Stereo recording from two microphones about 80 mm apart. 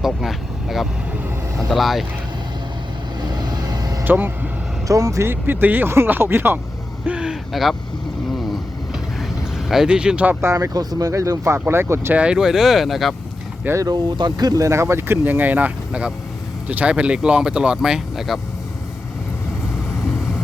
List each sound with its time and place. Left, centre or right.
0.0 s speech: centre
3.2 s vehicle: right
4.0 s speech: right
4.9 s speech: right
5.2 s speech: right
7.0 s a sound: centre
9.6 s speech: centre
10.4 s speech: right
12.1 s speech: centre
13.7 s speech: right
14.7 s speech: right; by 18.3 s centre
20.1 s vehicle: centre